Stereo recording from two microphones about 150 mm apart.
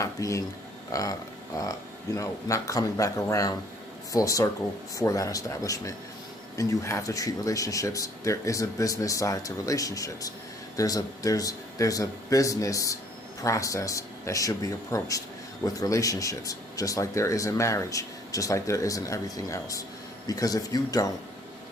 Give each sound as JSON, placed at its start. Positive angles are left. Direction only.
{"t": 0.0, "sound": "speech", "side_deg": 20}